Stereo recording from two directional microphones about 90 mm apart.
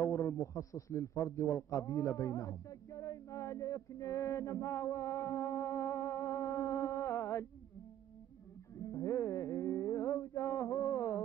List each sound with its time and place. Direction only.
0.0 s a man's voice: 35° left (ahead or behind)
8.8 s music: 35° left (ahead or behind)